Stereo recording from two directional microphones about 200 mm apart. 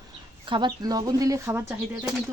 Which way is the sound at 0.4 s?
25° right (ahead or behind).